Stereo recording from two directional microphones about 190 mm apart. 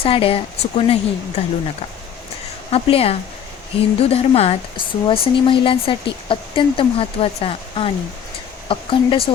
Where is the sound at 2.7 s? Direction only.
30° left (ahead or behind).